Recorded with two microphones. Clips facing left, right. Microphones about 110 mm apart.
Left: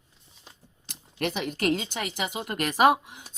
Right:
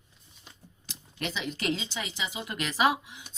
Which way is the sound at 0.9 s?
55° left (ahead or behind).